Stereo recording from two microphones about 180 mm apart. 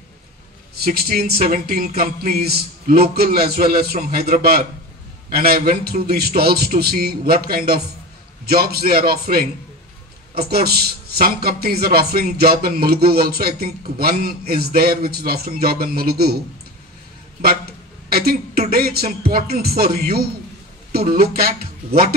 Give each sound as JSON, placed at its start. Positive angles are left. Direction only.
{"t": 0.7, "sound": "a woman's voice", "side_deg": -55}
{"t": 18.1, "sound": "a woman's voice", "side_deg": -60}